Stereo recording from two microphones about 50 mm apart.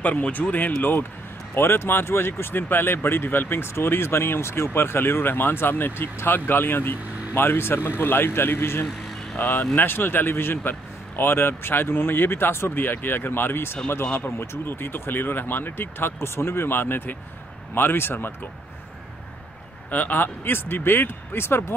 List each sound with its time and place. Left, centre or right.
0.0 s speech: left
1.5 s speech: left
19.9 s speech: left